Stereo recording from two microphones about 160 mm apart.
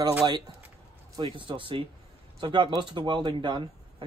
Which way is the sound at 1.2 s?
30° right (ahead or behind).